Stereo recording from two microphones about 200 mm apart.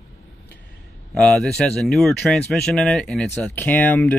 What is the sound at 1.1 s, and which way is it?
Speech, 5° left (ahead or behind).